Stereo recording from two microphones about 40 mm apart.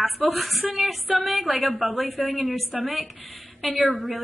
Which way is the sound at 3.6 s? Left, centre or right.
Centre.